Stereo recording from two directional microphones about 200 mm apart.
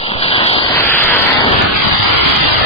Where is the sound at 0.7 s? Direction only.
10° left (ahead or behind).